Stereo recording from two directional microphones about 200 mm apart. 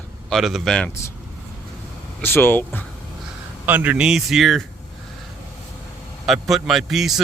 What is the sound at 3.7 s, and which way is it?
Speech, 10° right (ahead or behind).